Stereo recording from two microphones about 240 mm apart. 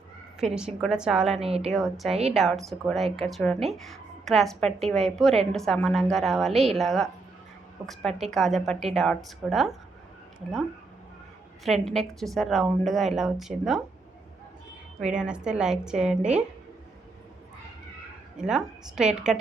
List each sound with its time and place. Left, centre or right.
0.5 s a woman's voice: centre
1.4 s a woman's voice: right
1.7 s a woman's voice: centre
11.6 s a woman's voice: centre
15.0 s a woman's voice: centre
18.3 s a woman's voice: centre